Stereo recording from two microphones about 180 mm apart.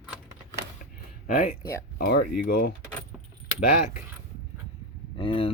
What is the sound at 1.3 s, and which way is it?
Speech, 50° left (ahead or behind).